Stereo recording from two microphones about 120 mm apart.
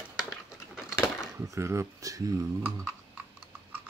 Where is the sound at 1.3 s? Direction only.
25° right (ahead or behind).